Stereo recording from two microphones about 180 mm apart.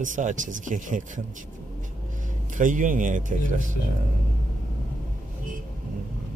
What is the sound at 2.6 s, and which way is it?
Speech, 45° right (ahead or behind).